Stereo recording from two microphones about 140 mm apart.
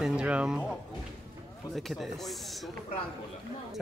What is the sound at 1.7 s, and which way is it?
Speech, centre (ahead or behind).